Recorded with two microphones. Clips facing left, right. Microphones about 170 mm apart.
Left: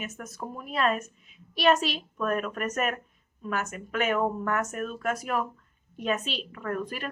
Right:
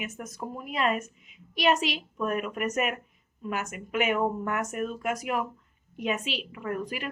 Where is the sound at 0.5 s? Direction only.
15° right (ahead or behind).